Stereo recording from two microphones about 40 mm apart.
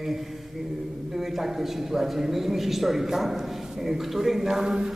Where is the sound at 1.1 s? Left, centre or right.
Centre.